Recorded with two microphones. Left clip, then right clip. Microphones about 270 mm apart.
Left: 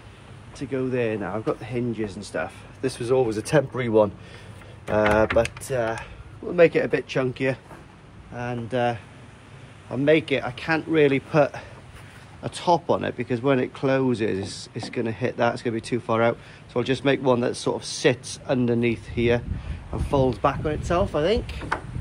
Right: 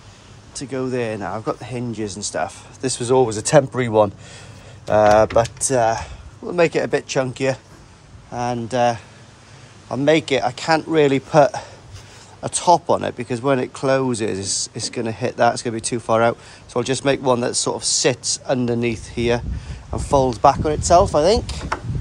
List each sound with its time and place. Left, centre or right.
0.6 s speech: centre